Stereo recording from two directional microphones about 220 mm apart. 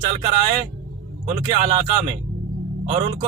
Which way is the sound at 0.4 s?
25° right (ahead or behind).